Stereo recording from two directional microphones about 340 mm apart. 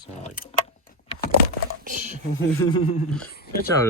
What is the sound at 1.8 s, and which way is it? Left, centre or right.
Speech, right.